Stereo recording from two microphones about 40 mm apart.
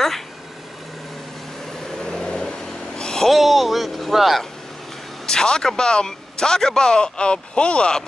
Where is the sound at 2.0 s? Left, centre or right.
Centre.